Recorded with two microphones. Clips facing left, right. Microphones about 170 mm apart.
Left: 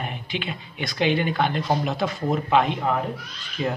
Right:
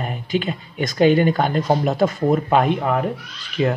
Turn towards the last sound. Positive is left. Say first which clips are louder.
# right 6 dB
turn(degrees=-90)